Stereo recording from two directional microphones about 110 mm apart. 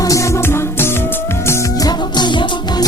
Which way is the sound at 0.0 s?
30° left (ahead or behind).